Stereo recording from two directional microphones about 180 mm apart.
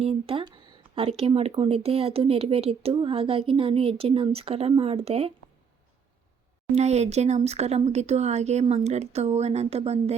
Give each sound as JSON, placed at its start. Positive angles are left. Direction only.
{"t": 0.0, "sound": "speech", "side_deg": -30}
{"t": 6.7, "sound": "speech", "side_deg": -35}